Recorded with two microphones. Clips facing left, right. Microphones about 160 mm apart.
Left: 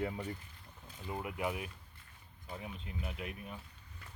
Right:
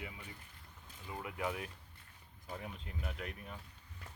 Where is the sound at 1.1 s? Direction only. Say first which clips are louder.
Left 2 dB; 20° left (ahead or behind).